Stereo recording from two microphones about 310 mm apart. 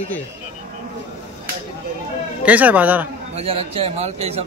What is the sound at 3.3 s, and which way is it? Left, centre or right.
A man's voice, centre.